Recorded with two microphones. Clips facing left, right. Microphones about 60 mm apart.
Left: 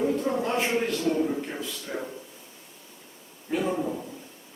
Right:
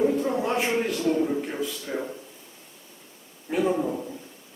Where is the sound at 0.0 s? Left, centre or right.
Centre.